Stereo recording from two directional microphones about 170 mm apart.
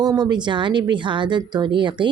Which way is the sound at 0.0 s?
25° right (ahead or behind).